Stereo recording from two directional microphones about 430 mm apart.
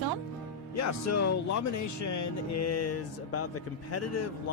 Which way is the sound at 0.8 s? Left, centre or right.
Left.